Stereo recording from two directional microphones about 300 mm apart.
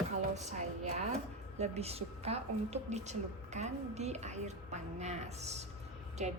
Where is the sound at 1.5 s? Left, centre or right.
Right.